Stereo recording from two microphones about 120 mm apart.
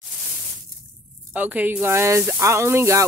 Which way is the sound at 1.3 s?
15° right (ahead or behind).